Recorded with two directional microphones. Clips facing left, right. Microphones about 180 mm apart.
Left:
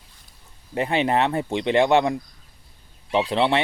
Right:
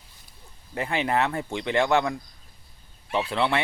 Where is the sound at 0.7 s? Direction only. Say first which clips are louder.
Left 4 dB; 20° left (ahead or behind).